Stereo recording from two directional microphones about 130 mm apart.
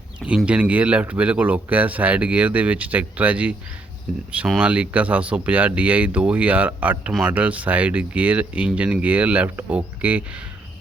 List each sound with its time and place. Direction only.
0.3 s speech: 10° right (ahead or behind)